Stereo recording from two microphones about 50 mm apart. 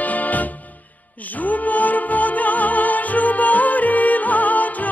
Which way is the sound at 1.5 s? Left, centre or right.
Left.